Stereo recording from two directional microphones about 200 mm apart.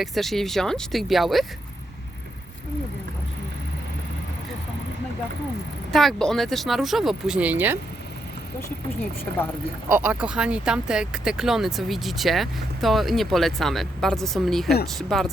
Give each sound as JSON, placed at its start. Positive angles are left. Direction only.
{"t": 0.0, "sound": "speech", "side_deg": 0}
{"t": 5.9, "sound": "speech", "side_deg": 0}
{"t": 9.9, "sound": "speech", "side_deg": -5}